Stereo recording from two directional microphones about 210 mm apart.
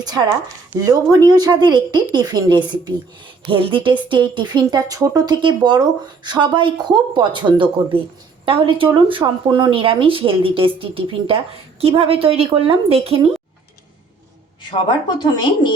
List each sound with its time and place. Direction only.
0.0 s speech: 15° right (ahead or behind)
14.8 s a woman's voice: 20° left (ahead or behind)